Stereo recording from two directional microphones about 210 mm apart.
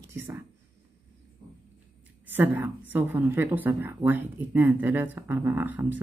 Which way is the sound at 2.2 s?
10° right (ahead or behind).